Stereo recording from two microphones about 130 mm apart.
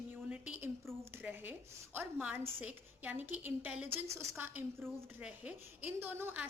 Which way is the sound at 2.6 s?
15° right (ahead or behind).